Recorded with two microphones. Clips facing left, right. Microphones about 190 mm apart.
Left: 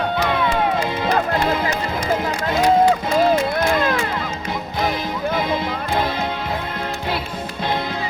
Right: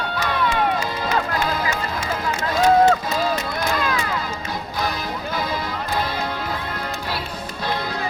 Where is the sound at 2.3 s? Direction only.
25° left (ahead or behind).